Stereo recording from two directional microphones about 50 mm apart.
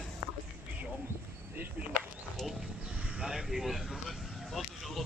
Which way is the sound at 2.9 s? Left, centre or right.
Right.